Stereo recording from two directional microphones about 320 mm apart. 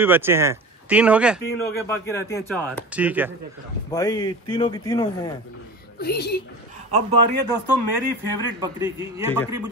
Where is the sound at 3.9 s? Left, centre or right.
Centre.